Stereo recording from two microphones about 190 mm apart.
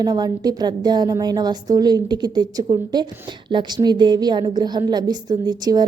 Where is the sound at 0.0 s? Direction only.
20° right (ahead or behind).